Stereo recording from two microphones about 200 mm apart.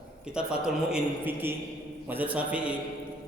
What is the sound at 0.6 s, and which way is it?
A man's voice, 5° right (ahead or behind).